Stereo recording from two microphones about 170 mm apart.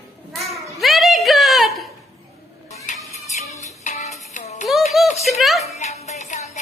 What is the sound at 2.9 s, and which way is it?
Music, 45° left (ahead or behind).